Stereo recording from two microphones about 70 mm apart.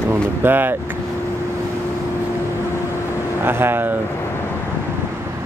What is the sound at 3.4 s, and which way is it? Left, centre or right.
Speech, right.